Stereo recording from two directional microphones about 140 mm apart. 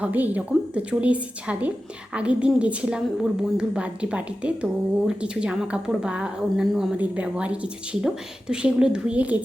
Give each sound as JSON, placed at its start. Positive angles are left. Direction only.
{"t": 0.0, "sound": "speech", "side_deg": -10}